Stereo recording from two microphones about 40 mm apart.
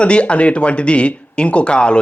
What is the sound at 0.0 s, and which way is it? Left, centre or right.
Speech, left.